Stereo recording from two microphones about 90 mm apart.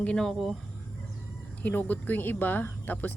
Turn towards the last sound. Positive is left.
turn(degrees=20)  # may be behind; listen again after turning